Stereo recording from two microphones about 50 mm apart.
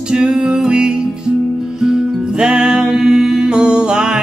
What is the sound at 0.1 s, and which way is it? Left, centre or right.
Music, centre.